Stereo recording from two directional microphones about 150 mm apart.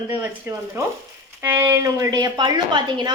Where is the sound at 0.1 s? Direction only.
15° right (ahead or behind).